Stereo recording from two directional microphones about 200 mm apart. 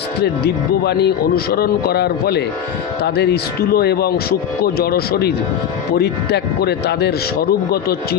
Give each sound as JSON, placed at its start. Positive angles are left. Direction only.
{"t": 0.2, "sound": "speech", "side_deg": 55}